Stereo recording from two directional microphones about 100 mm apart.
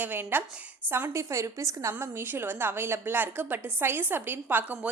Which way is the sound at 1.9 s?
20° right (ahead or behind).